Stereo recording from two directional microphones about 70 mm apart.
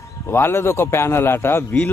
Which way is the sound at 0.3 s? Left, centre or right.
Left.